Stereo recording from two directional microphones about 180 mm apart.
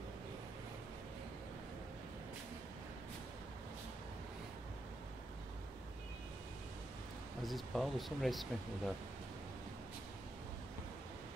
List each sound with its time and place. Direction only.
7.4 s speech: centre (ahead or behind)